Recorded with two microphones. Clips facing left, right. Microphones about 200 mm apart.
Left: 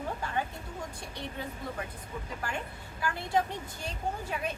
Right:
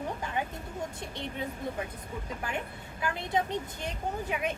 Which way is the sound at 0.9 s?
20° right (ahead or behind).